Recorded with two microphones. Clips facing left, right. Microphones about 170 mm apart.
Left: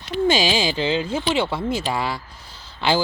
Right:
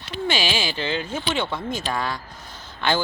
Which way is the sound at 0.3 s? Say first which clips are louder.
Left 5 dB; 20° left (ahead or behind).